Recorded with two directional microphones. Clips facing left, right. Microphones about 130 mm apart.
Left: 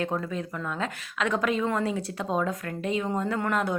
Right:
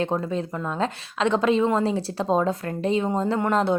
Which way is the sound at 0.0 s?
25° right (ahead or behind).